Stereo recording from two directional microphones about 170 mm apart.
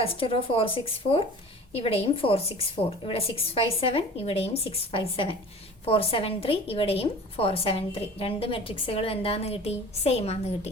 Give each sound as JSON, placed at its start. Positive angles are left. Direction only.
{"t": 0.0, "sound": "a woman's voice", "side_deg": 35}